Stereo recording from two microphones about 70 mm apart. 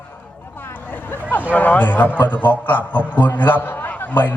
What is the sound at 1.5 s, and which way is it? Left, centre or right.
A man's voice, left.